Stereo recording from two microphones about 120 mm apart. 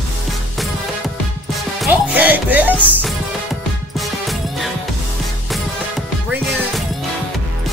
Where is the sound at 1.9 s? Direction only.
15° right (ahead or behind).